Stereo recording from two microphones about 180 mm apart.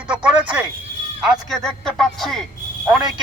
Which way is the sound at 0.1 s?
5° right (ahead or behind).